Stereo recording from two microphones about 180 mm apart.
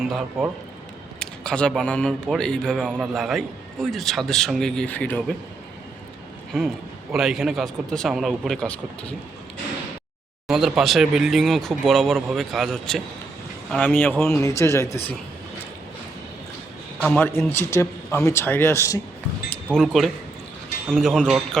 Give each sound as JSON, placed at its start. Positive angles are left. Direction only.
{"t": 0.0, "sound": "a man's voice", "side_deg": -5}
{"t": 7.1, "sound": "a man's voice", "side_deg": 0}
{"t": 10.5, "sound": "a man's voice", "side_deg": 0}
{"t": 14.4, "sound": "speech", "side_deg": 15}
{"t": 17.0, "sound": "speech", "side_deg": 10}
{"t": 19.7, "sound": "a man's voice", "side_deg": 0}